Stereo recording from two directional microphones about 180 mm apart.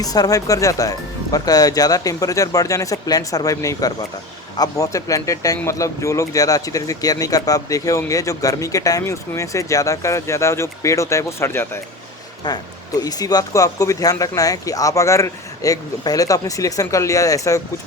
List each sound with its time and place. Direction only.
0.0 s speech: 20° left (ahead or behind)